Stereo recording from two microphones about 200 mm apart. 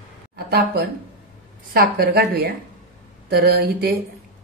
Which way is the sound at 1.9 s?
50° right (ahead or behind).